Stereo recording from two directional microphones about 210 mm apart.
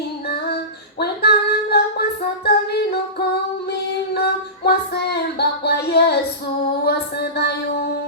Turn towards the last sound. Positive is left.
turn(degrees=50)  # may be behind; listen again after turning